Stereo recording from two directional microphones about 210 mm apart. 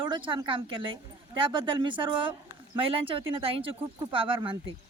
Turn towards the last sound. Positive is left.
turn(degrees=-25)  # may be behind; listen again after turning